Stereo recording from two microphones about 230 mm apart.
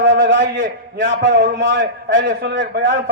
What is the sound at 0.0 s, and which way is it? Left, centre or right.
A man's voice, right.